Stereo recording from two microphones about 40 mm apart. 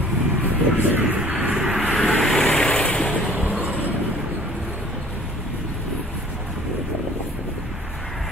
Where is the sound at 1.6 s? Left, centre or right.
Centre.